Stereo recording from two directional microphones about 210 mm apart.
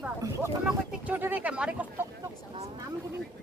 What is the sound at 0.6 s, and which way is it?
Speech, 5° right (ahead or behind).